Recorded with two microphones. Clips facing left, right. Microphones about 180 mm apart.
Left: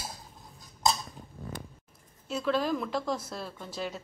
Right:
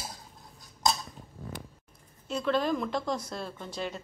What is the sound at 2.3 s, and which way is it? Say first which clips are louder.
A woman's voice: right 1 dB; 5° left (ahead or behind).